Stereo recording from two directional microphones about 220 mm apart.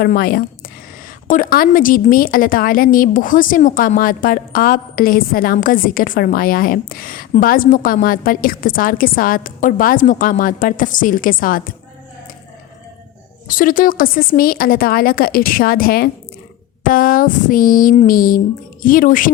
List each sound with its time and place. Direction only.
0.0 s a woman's voice: 40° left (ahead or behind)
13.5 s a woman's voice: 40° left (ahead or behind)